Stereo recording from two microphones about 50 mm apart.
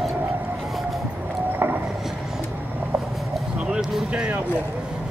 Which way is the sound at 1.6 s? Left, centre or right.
Right.